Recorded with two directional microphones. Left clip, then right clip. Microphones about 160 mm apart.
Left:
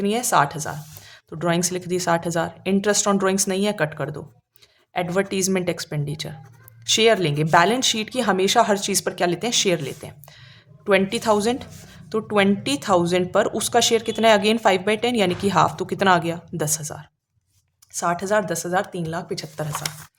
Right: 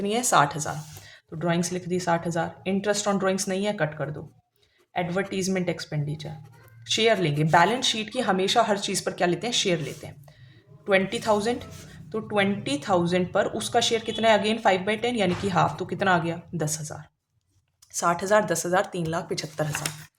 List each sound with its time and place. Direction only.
0.0 s a woman's voice: 25° left (ahead or behind)
17.9 s speech: 15° left (ahead or behind)